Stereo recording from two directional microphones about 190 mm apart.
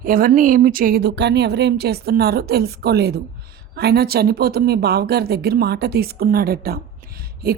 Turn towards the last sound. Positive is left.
turn(degrees=-50)  # may be behind; listen again after turning